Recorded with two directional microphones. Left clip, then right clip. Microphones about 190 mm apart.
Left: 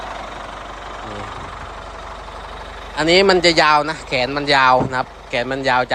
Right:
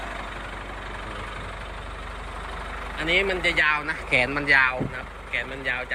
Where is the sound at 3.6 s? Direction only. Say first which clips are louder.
Left 8 dB; 20° left (ahead or behind).